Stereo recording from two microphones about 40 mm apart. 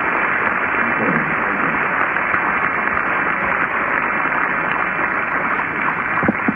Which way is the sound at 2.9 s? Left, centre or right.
Centre.